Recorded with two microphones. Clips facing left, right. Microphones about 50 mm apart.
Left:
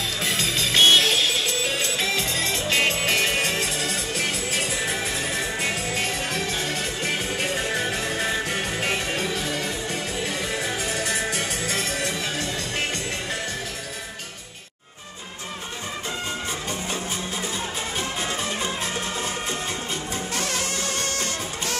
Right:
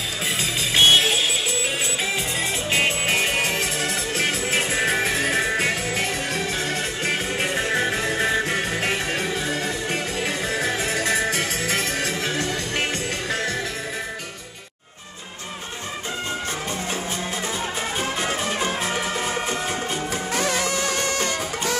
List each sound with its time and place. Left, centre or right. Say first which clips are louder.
0.4 s music: right 1 dB; centre; by 12.8 s right